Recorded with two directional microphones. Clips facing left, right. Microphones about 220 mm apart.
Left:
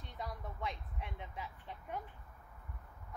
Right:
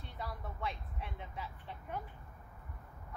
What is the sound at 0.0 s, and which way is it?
Vehicle, 15° left (ahead or behind).